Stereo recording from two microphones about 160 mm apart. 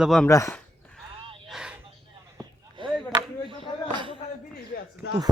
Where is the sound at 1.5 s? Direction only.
5° right (ahead or behind).